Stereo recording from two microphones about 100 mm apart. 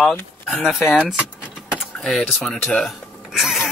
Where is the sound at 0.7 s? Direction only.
5° right (ahead or behind).